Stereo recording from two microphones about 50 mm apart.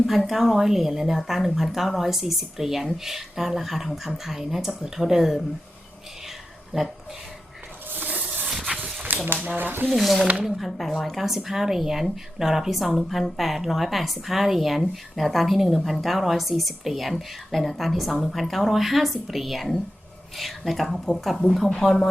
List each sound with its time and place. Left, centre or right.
0.0 s speech: centre
6.7 s speech: centre
7.9 s a sound: right
9.2 s speech: right
9.9 s speech: centre